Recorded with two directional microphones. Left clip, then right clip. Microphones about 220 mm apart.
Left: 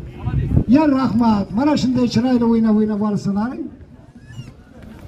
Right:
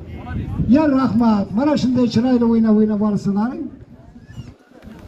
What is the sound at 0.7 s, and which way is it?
A man's voice, 50° left (ahead or behind).